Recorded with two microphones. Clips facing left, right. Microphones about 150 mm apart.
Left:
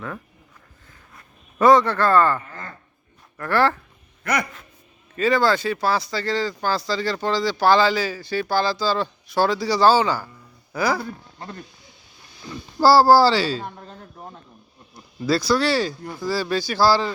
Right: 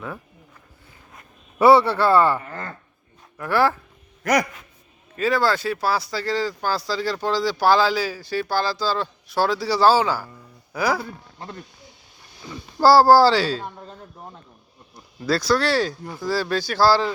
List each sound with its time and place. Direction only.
1.5 s a man's voice: 10° right (ahead or behind)
2.5 s speech: 45° right (ahead or behind)
3.3 s a man's voice: 10° right (ahead or behind)
5.1 s speech: 5° right (ahead or behind)
12.8 s speech: 5° left (ahead or behind)
14.9 s speech: 5° left (ahead or behind)